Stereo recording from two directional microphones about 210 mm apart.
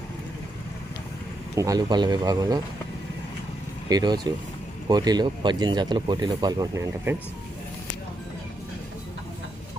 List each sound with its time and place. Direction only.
1.5 s speech: 15° right (ahead or behind)
3.8 s speech: 20° right (ahead or behind)